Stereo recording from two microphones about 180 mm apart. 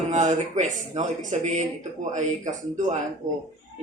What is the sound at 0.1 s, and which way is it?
Speech, 40° right (ahead or behind).